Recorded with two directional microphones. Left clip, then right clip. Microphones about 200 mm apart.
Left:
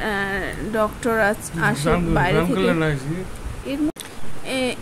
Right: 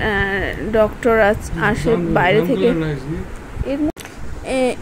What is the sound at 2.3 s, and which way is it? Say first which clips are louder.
Speech: right 4 dB; 50° left (ahead or behind).